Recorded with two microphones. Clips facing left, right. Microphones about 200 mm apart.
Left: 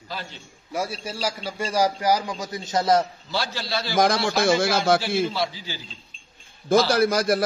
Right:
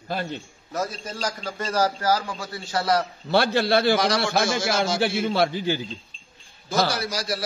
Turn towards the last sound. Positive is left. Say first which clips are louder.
# left 9 dB
turn(degrees=55)  # may be behind; listen again after turning